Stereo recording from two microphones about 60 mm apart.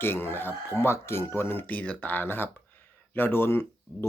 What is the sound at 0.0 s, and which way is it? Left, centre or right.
Speech, left.